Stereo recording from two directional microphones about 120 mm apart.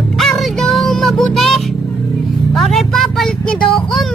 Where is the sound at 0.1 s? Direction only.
Centre (ahead or behind).